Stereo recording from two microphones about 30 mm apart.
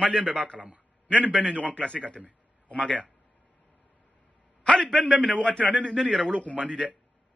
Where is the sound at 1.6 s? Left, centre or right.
Left.